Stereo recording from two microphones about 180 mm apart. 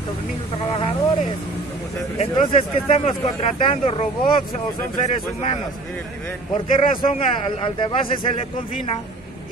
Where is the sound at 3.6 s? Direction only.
35° left (ahead or behind).